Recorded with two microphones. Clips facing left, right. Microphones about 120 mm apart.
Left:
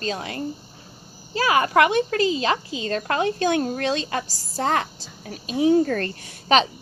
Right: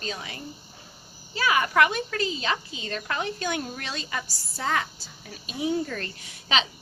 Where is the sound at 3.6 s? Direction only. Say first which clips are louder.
Left 11 dB; 45° left (ahead or behind).